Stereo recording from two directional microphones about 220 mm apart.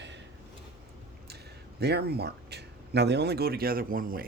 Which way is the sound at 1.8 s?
45° right (ahead or behind).